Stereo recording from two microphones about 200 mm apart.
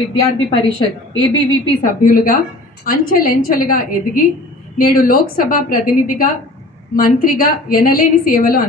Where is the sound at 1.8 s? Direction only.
45° left (ahead or behind).